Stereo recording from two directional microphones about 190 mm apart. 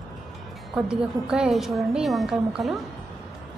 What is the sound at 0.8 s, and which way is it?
A woman's voice, 5° right (ahead or behind).